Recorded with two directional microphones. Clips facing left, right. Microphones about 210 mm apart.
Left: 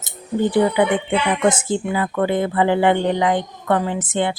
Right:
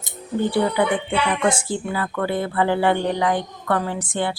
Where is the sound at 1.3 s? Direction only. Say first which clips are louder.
Left 5 dB; 20° left (ahead or behind).